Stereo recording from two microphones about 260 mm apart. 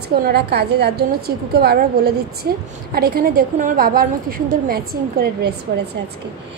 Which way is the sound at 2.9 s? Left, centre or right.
Right.